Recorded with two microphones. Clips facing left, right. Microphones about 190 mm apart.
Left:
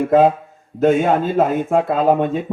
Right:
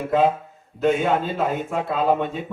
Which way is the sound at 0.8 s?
50° left (ahead or behind).